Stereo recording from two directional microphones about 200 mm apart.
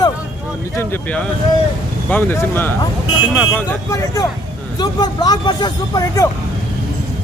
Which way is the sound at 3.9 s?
15° left (ahead or behind).